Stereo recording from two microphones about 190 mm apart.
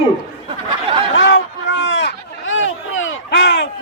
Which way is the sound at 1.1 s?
70° left (ahead or behind).